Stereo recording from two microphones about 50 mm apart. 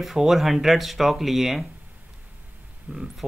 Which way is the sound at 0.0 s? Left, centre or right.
Centre.